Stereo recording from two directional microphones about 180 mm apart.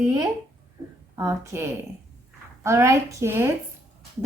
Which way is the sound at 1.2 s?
15° right (ahead or behind).